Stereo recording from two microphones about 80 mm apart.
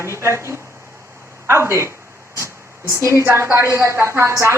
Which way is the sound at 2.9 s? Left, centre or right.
Right.